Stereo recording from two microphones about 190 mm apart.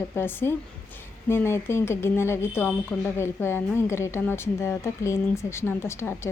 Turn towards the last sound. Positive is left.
turn(degrees=15)  # may be behind; listen again after turning